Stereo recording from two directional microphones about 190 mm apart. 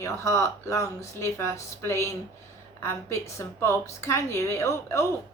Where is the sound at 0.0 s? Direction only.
15° left (ahead or behind).